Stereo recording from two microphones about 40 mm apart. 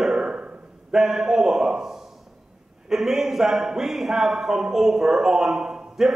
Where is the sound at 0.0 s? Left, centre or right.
Centre.